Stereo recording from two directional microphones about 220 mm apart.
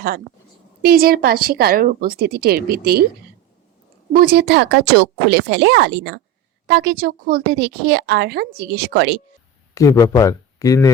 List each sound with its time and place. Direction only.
0.8 s speech: 45° right (ahead or behind)
4.1 s speech: 45° right (ahead or behind)
9.7 s a man's voice: 15° left (ahead or behind)